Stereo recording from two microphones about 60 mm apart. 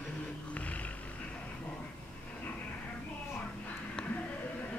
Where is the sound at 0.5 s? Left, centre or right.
Left.